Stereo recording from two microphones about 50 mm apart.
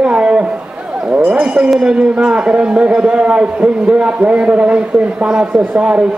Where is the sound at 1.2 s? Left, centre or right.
Centre.